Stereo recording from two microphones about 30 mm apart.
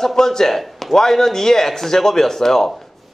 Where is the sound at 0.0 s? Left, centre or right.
Centre.